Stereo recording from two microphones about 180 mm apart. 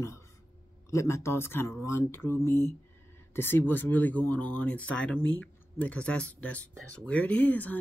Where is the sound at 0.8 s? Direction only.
15° left (ahead or behind).